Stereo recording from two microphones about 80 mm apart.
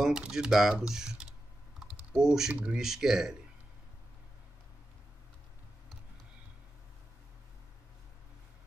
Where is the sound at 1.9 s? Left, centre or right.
Centre.